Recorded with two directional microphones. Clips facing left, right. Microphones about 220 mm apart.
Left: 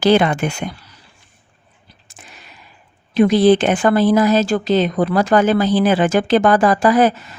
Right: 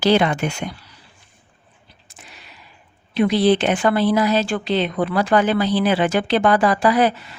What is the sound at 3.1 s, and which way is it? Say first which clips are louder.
Speech: left 4 dB; 45° left (ahead or behind).